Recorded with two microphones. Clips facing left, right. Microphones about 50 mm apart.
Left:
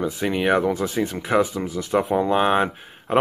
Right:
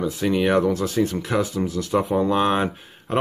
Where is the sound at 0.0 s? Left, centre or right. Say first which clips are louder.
Right 1 dB; centre.